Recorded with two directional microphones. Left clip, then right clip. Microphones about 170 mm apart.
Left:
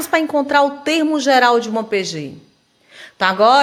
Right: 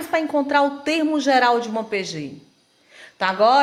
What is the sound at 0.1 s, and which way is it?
A woman's voice, 30° left (ahead or behind).